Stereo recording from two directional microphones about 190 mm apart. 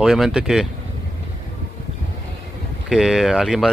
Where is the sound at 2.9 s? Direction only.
Centre (ahead or behind).